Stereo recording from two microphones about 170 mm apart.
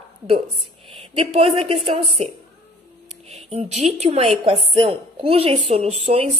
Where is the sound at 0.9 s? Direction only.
30° right (ahead or behind).